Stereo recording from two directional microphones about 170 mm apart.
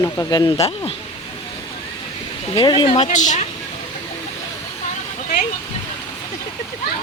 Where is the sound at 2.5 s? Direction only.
25° left (ahead or behind).